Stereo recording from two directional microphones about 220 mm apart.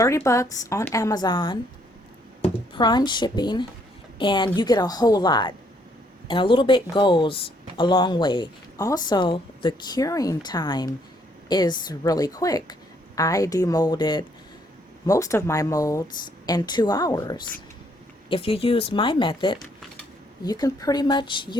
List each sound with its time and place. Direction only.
0.0 s speech: 15° left (ahead or behind)
2.7 s a woman's voice: 20° left (ahead or behind)